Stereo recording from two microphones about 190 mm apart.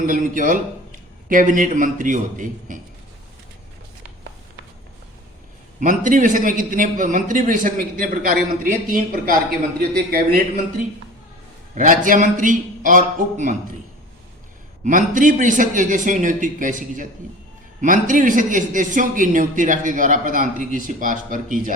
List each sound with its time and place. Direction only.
0.0 s a man's voice: 45° right (ahead or behind)
5.8 s a man's voice: 45° right (ahead or behind)
11.7 s a man's voice: 45° right (ahead or behind)
14.8 s a man's voice: 45° right (ahead or behind)